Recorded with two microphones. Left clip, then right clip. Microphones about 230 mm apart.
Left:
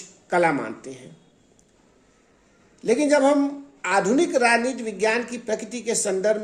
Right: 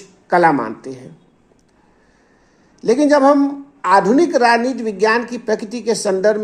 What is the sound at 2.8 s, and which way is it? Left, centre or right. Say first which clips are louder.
A woman's voice: right 6 dB; right.